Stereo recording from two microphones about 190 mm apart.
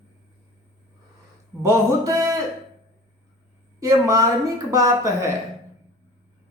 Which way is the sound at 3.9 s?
15° right (ahead or behind).